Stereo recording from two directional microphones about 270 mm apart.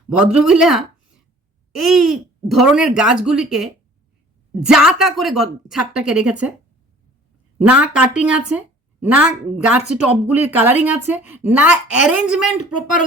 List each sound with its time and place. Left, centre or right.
0.1 s speech: centre
7.6 s speech: centre
12.5 s speech: left